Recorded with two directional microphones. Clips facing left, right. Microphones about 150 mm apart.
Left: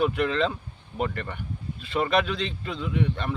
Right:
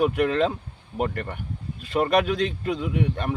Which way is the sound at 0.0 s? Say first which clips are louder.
Right 3 dB; 45° right (ahead or behind).